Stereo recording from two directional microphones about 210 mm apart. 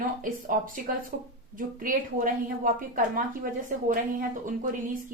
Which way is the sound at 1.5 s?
40° right (ahead or behind).